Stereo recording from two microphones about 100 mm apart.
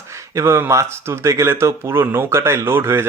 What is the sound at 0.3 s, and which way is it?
Speech, 25° right (ahead or behind).